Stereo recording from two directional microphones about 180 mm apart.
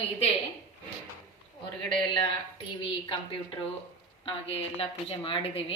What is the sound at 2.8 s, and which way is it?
Speech, 30° left (ahead or behind).